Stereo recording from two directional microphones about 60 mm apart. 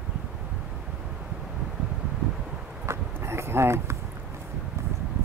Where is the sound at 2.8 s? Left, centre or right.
Right.